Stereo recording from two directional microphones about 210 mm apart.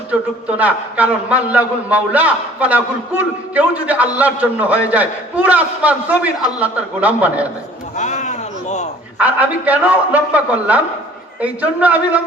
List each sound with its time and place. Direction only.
0.1 s a man's voice: 5° right (ahead or behind)
7.9 s a sound: 35° left (ahead or behind)
9.1 s a man's voice: 5° right (ahead or behind)